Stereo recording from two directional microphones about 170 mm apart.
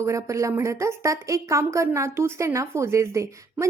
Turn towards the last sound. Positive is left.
turn(degrees=-15)  # may be behind; listen again after turning